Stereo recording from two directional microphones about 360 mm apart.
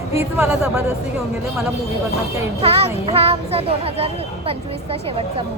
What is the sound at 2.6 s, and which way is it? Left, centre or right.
Speech, centre.